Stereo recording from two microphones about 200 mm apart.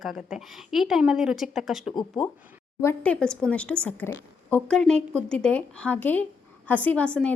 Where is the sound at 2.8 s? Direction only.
10° left (ahead or behind).